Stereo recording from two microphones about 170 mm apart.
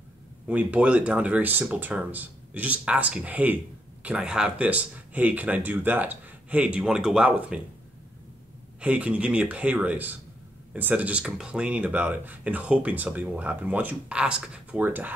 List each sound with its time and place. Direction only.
0.5 s speech: 10° right (ahead or behind)
8.8 s speech: 5° right (ahead or behind)